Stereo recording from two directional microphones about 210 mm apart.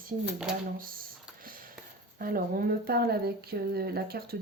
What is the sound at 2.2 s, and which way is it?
Speech, 45° right (ahead or behind).